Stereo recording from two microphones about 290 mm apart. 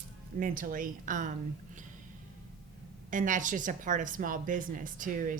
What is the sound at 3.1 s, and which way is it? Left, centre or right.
A woman's voice, right.